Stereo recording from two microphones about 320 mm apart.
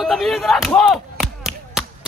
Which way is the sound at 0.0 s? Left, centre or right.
Centre.